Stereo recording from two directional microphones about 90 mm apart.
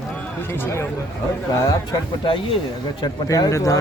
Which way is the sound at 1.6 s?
40° left (ahead or behind).